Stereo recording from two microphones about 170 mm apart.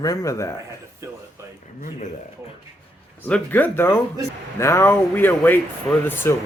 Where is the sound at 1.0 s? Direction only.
15° right (ahead or behind).